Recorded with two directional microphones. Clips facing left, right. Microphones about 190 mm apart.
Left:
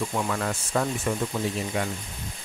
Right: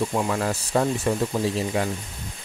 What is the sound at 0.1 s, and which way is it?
Speech, 25° right (ahead or behind).